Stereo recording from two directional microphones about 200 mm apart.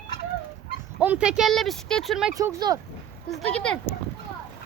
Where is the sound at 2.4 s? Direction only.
20° right (ahead or behind).